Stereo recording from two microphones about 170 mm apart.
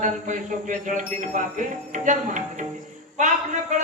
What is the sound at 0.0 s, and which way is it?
A man's voice, 50° right (ahead or behind).